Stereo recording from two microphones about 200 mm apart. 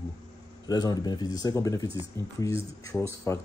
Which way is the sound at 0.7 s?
20° left (ahead or behind).